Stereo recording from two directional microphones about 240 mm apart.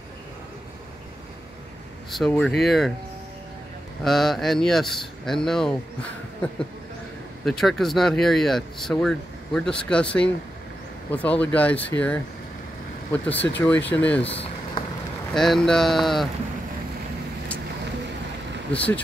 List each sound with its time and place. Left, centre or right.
2.0 s speech: centre
4.0 s speech: centre
7.4 s speech: centre
11.1 s speech: centre
14.2 s vehicle: left
15.3 s speech: centre
18.7 s speech: centre